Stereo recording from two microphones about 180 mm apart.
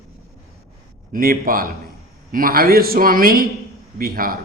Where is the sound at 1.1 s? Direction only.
55° right (ahead or behind).